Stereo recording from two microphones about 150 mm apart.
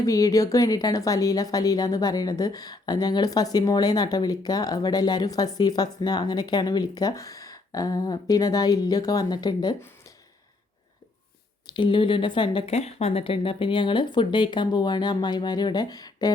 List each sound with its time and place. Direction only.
0.0 s speech: 20° left (ahead or behind)
11.7 s speech: 35° left (ahead or behind)
12.7 s speech: 45° left (ahead or behind); by 16.3 s 25° left (ahead or behind)